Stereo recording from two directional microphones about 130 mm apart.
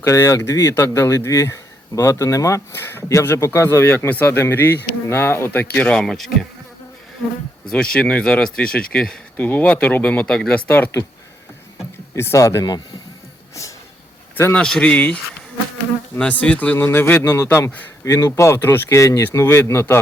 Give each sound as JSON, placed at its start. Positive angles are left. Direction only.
{"t": 0.0, "sound": "speech", "side_deg": 25}
{"t": 7.7, "sound": "speech", "side_deg": 5}
{"t": 10.7, "sound": "speech", "side_deg": 15}
{"t": 12.1, "sound": "speech", "side_deg": 20}
{"t": 14.3, "sound": "speech", "side_deg": 15}
{"t": 14.6, "sound": "speech", "side_deg": 5}